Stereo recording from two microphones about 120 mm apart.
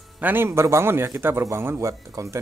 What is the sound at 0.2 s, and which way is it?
Speech, 15° right (ahead or behind).